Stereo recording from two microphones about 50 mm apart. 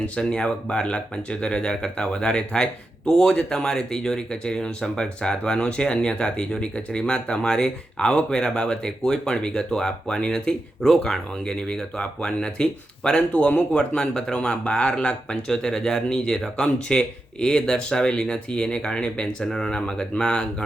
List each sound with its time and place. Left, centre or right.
0.2 s speech: centre